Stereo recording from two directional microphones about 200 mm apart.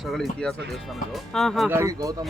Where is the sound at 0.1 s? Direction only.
Centre (ahead or behind).